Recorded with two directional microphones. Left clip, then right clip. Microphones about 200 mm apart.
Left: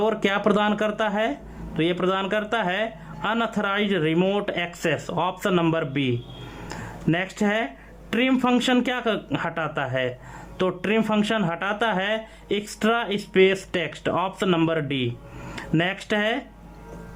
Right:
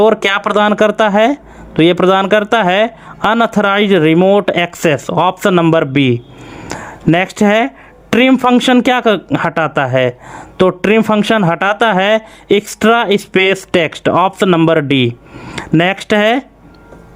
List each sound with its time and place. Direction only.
0.0 s speech: 40° right (ahead or behind)